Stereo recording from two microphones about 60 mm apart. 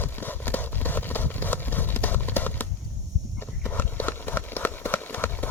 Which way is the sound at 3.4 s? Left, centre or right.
Left.